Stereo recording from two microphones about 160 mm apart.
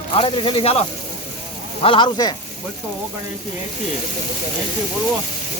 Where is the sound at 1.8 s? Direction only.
30° left (ahead or behind).